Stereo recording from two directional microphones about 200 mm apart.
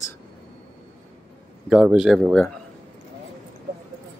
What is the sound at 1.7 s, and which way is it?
Speech, 5° right (ahead or behind).